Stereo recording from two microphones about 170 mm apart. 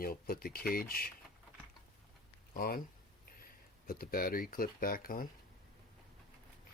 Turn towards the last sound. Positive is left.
turn(degrees=60)  # may be behind; listen again after turning